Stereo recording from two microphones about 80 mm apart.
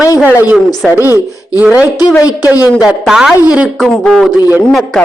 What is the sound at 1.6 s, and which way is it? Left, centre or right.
Speech, centre.